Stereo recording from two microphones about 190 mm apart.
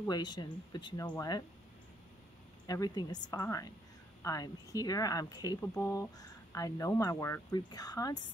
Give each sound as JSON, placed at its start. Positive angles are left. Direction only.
{"t": 0.0, "sound": "speech", "side_deg": 20}
{"t": 2.6, "sound": "speech", "side_deg": 20}